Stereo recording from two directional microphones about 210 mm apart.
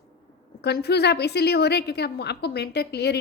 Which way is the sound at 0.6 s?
50° left (ahead or behind).